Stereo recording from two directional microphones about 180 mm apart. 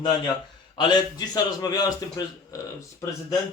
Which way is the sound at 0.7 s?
25° left (ahead or behind).